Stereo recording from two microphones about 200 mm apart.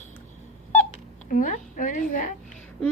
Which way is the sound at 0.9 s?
40° left (ahead or behind).